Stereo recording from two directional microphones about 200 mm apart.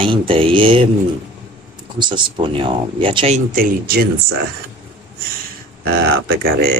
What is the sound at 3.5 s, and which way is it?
Speech, 45° right (ahead or behind).